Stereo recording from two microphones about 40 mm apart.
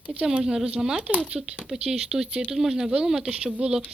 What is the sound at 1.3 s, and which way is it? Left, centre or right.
Speech, right.